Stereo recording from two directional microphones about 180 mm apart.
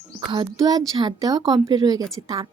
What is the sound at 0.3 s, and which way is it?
A woman's voice, 25° right (ahead or behind).